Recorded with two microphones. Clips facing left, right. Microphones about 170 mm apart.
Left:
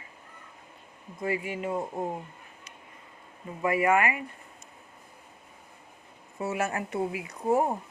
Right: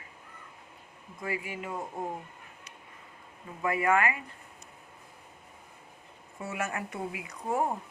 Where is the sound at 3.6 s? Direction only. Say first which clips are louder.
Left 2 dB; 20° left (ahead or behind).